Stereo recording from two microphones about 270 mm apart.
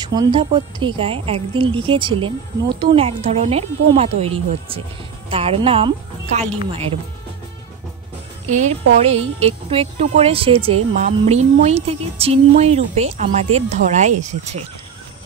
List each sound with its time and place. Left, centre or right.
0.0 s speech: centre
8.5 s speech: right